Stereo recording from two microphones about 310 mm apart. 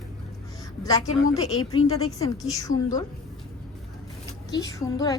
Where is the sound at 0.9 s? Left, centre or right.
Centre.